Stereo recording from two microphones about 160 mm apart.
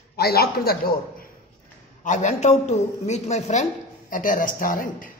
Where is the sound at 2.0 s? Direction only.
45° left (ahead or behind).